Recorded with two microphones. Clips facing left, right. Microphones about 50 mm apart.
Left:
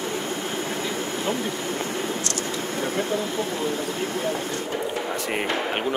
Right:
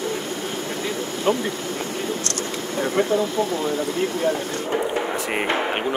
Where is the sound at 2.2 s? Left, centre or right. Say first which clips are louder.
Right 1 dB; right.